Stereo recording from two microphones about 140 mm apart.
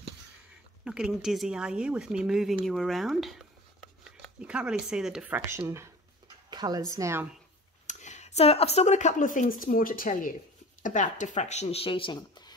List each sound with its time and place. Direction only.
0.8 s speech: 5° right (ahead or behind)
5.5 s a sound: 20° right (ahead or behind)
6.5 s a sound: 30° right (ahead or behind)
7.0 s speech: 20° right (ahead or behind)
7.8 s speech: 60° left (ahead or behind); by 10.3 s 80° left
10.8 s speech: 65° left (ahead or behind); by 12.5 s 30° left (ahead or behind)